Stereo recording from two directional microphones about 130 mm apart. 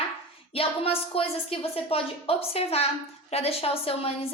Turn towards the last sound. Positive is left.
turn(degrees=50)  # may be behind; listen again after turning